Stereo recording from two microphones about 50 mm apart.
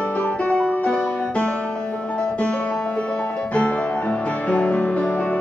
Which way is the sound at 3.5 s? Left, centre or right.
Left.